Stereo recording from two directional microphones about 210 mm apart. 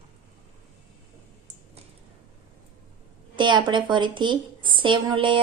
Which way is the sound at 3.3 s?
20° right (ahead or behind).